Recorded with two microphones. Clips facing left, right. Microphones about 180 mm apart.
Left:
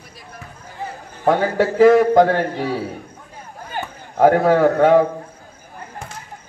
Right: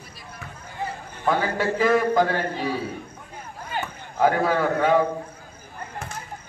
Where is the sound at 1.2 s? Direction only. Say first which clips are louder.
Left 6 dB; 70° left (ahead or behind).